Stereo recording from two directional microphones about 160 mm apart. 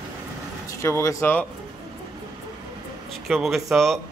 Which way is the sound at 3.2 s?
Centre (ahead or behind).